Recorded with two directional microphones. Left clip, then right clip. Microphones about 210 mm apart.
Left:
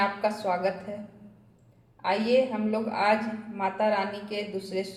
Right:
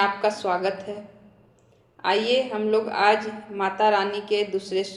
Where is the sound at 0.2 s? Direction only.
15° right (ahead or behind).